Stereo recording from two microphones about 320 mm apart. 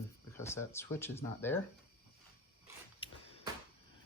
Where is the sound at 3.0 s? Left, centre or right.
Centre.